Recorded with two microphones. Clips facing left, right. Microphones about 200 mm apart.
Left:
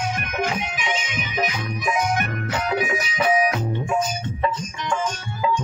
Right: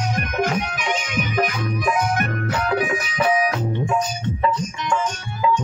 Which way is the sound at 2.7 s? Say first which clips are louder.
Right 1 dB; 50° right (ahead or behind).